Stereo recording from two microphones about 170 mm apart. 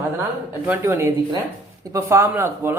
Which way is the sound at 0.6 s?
15° right (ahead or behind).